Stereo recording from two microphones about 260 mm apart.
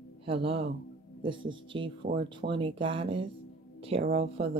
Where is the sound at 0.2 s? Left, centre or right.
Right.